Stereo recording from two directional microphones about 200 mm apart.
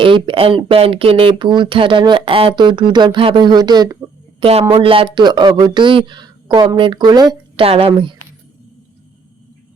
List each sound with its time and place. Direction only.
0.0 s speech: 25° right (ahead or behind)